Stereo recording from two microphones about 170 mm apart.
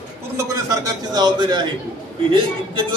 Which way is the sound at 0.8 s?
25° right (ahead or behind).